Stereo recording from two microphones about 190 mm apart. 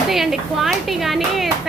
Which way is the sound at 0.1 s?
Centre (ahead or behind).